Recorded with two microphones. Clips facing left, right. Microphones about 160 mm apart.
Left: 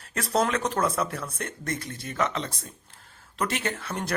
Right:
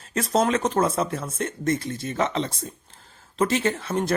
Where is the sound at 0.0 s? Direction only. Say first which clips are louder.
Right 3 dB; 20° right (ahead or behind).